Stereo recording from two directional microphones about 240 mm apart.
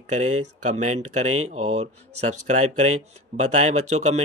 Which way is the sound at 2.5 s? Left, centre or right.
Right.